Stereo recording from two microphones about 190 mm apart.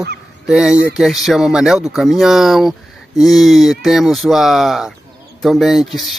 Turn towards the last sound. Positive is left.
turn(degrees=0)  # may be behind; listen again after turning